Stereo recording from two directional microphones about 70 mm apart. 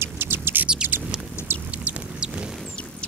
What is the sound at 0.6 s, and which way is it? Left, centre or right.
Rodents, centre.